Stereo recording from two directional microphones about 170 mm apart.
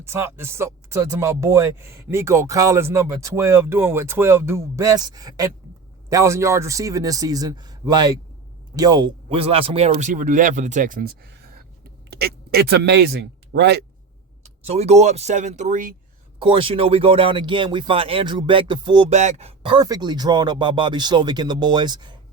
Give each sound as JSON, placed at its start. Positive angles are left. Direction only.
{"t": 0.0, "sound": "speech", "side_deg": -15}
{"t": 14.4, "sound": "speech", "side_deg": -40}
{"t": 16.4, "sound": "speech", "side_deg": -30}
{"t": 19.1, "sound": "speech", "side_deg": -40}